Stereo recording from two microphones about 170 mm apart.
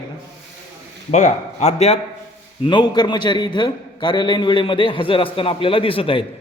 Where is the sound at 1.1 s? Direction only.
45° left (ahead or behind).